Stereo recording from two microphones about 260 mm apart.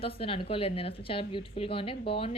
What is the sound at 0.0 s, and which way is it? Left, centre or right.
A woman's voice, left.